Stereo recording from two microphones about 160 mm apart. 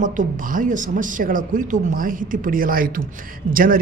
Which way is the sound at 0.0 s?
55° right (ahead or behind).